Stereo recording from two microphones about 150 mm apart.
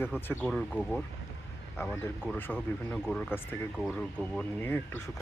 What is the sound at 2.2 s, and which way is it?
Speech, 10° left (ahead or behind).